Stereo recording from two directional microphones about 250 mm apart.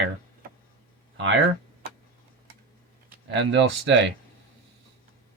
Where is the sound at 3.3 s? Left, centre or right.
Right.